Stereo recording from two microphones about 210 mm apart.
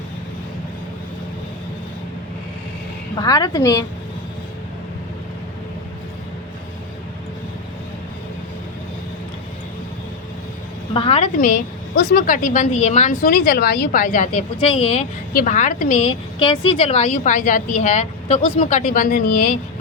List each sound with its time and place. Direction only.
3.2 s a woman's voice: 20° left (ahead or behind)
10.9 s a woman's voice: 25° left (ahead or behind)
11.3 s a woman's voice: 40° left (ahead or behind)